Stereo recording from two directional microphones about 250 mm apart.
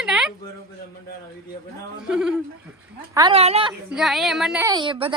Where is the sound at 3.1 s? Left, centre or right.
Centre.